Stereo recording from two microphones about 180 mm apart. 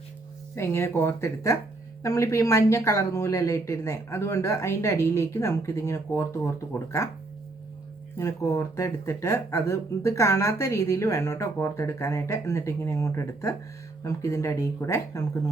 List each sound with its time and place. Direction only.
0.5 s speech: 15° left (ahead or behind)
8.2 s speech: 15° left (ahead or behind)